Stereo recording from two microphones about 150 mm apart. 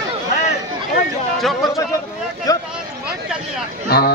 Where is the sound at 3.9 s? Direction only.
90° left.